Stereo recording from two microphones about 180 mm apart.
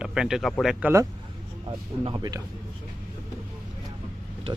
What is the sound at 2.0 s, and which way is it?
Speech, 25° right (ahead or behind).